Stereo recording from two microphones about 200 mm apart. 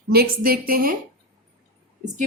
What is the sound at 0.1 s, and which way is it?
Speech, 50° right (ahead or behind).